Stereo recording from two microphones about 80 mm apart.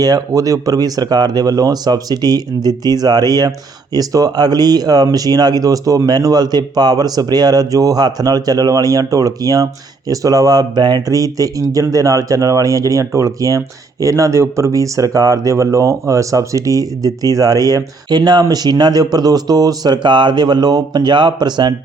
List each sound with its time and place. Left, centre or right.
0.0 s speech: right
11.1 s speech: right